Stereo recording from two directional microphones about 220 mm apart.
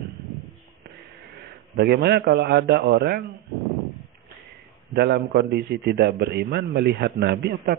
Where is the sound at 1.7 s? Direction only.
45° right (ahead or behind).